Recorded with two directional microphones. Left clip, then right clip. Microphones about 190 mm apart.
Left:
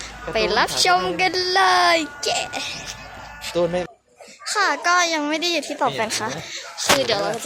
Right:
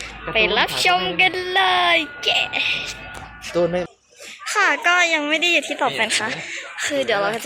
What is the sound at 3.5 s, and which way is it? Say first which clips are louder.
Speech: right 1 dB; 35° right (ahead or behind).